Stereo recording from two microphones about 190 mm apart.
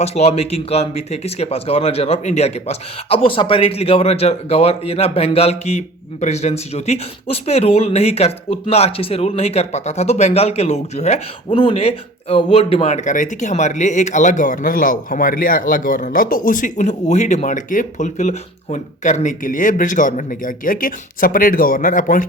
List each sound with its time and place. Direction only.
0.0 s speech: 35° left (ahead or behind)